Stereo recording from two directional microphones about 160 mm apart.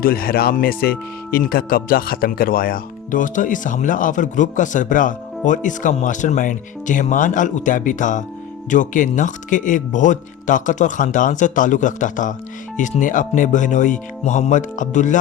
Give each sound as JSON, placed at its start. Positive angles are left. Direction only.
{"t": 0.0, "sound": "speech", "side_deg": 70}